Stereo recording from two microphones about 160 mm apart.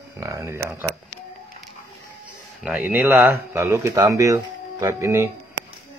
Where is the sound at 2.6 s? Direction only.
10° right (ahead or behind).